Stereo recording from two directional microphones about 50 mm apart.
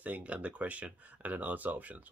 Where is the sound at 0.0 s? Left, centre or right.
Right.